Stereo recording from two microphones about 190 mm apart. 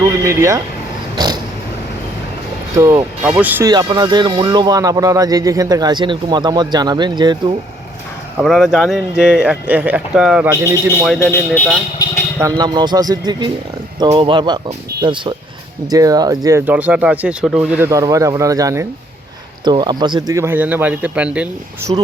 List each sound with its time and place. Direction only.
0.0 s speech: 15° right (ahead or behind)
1.1 s a sound: 20° right (ahead or behind)
2.7 s speech: 20° right (ahead or behind)
3.2 s speech: 5° right (ahead or behind)
3.6 s speech: 20° right (ahead or behind)
8.4 s speech: 5° right (ahead or behind)
10.5 s speech: 15° right (ahead or behind)
11.2 s speech: 15° left (ahead or behind)
12.4 s speech: 20° right (ahead or behind)
21.9 s speech: 30° right (ahead or behind)